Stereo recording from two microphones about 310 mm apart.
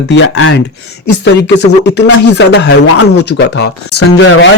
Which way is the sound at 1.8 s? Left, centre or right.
Left.